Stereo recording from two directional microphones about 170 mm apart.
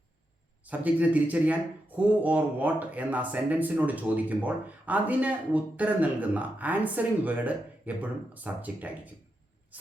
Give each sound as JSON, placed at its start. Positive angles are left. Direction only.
{"t": 0.6, "sound": "a man's voice", "side_deg": -10}